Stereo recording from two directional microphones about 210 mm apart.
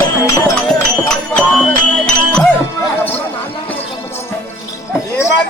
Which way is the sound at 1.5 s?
5° left (ahead or behind).